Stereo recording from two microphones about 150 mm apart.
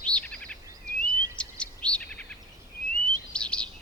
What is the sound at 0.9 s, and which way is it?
Chirp, 20° right (ahead or behind).